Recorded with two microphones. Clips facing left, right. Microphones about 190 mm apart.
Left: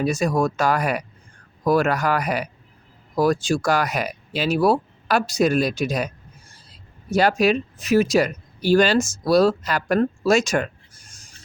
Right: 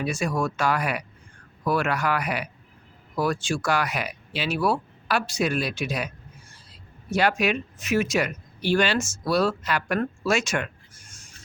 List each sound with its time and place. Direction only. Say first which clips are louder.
0.0 s speech: left 5 dB; 40° left (ahead or behind)
7.1 s speech: left 5 dB; 35° left (ahead or behind)